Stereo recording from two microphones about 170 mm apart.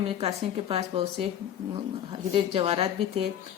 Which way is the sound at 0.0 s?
35° right (ahead or behind).